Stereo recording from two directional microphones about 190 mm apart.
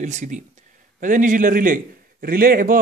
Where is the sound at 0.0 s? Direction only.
40° right (ahead or behind).